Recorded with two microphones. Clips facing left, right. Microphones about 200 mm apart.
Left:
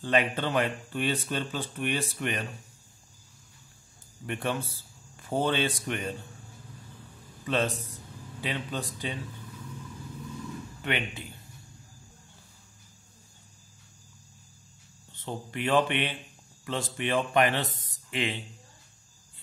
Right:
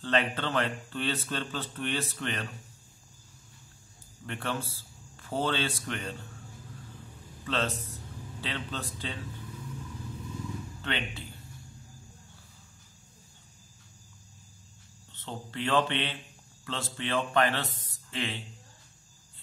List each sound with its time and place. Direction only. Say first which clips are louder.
0.0 s speech: left 2 dB; 10° left (ahead or behind)
4.3 s speech: left 3 dB; 15° left (ahead or behind)
7.4 s speech: left 3 dB; 15° left (ahead or behind)
10.8 s speech: left 4 dB; 15° left (ahead or behind)
15.1 s speech: left 2 dB; 15° left (ahead or behind)